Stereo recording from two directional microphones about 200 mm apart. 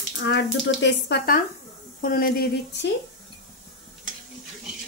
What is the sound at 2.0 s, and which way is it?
Speech, 45° left (ahead or behind).